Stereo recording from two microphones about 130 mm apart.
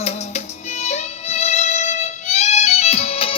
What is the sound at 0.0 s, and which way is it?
Music, 60° left (ahead or behind).